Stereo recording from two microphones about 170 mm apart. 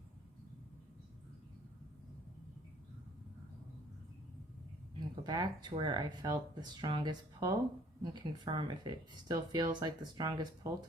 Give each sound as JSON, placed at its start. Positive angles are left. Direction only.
{"t": 4.9, "sound": "speech", "side_deg": -25}